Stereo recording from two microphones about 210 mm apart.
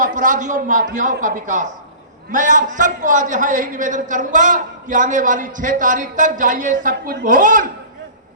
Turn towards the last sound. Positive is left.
turn(degrees=-40)  # may be behind; listen again after turning